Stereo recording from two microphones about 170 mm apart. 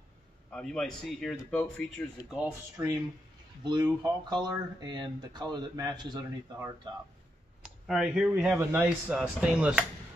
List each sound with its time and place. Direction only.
0.5 s speech: 5° left (ahead or behind)
2.3 s speech: 10° right (ahead or behind)
3.8 s speech: 25° right (ahead or behind)
7.6 s speech: centre (ahead or behind)